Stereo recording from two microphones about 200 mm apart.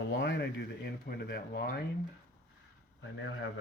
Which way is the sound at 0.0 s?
60° left (ahead or behind).